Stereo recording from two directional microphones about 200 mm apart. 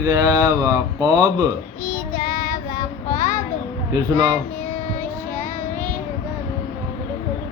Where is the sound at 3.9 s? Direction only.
15° right (ahead or behind).